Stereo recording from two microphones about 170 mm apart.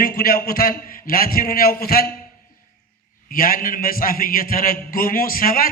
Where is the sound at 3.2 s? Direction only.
55° left (ahead or behind).